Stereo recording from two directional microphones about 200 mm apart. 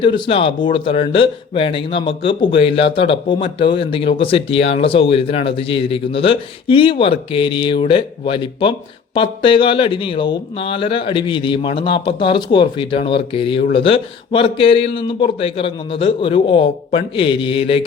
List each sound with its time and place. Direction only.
0.0 s speech: 25° left (ahead or behind)